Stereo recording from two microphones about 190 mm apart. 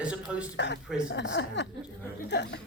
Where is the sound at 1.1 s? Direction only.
70° left (ahead or behind).